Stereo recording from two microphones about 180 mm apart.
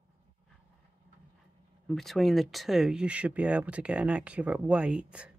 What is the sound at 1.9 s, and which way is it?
Speech, centre (ahead or behind).